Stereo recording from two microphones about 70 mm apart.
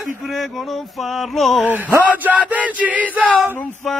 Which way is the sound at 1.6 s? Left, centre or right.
Right.